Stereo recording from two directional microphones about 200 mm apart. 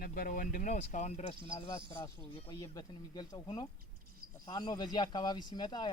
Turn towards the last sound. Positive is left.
turn(degrees=20)  # may be behind; listen again after turning